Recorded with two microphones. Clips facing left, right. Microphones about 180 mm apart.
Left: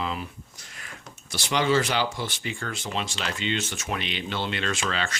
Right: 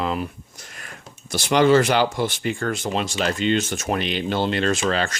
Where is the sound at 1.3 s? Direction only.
50° right (ahead or behind).